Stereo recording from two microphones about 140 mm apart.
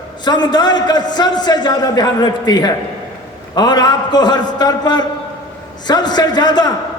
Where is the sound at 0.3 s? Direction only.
30° left (ahead or behind).